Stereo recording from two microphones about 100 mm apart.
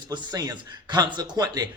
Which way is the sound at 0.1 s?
45° right (ahead or behind).